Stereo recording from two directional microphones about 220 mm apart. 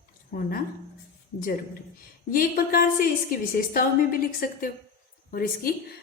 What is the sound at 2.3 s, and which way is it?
A woman's voice, 40° left (ahead or behind).